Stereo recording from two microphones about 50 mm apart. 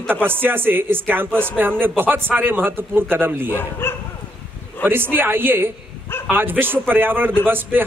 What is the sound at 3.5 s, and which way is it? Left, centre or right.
Speech, left.